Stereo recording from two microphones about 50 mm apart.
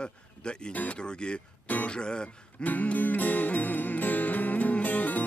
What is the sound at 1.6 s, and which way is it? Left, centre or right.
Speech, left.